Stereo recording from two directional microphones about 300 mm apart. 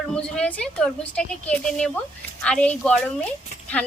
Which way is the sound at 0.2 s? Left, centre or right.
Centre.